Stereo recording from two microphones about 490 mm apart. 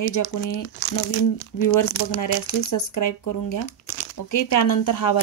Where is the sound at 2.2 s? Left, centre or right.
Left.